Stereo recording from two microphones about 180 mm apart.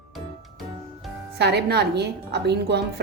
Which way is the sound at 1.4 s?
65° right (ahead or behind).